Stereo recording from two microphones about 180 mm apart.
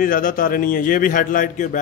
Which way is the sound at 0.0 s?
50° left (ahead or behind).